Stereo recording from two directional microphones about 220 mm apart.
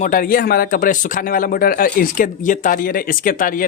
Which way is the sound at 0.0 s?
40° left (ahead or behind).